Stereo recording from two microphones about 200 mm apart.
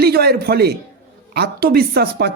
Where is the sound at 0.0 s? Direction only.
50° right (ahead or behind).